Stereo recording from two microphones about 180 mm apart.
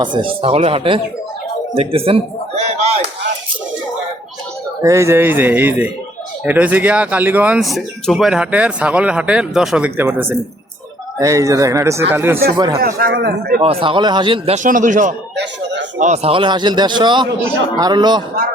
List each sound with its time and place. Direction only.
0.0 s a man's voice: 25° right (ahead or behind)
4.8 s speech: 15° right (ahead or behind)
12.8 s a man's voice: 60° right (ahead or behind)
13.6 s a man's voice: 30° right (ahead or behind)